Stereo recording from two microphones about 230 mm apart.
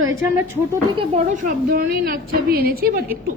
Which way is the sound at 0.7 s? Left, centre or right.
Right.